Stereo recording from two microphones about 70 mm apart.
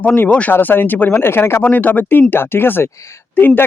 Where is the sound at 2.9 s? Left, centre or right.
Left.